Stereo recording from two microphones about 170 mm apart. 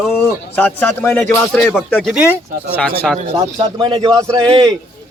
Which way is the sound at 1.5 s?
Centre (ahead or behind).